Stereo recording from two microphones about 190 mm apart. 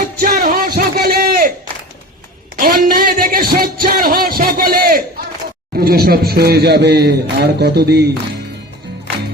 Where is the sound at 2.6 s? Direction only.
50° right (ahead or behind).